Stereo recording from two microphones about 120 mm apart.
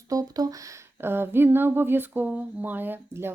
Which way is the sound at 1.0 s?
20° right (ahead or behind).